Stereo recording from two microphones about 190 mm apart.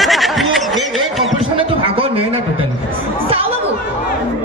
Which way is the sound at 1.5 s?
30° right (ahead or behind).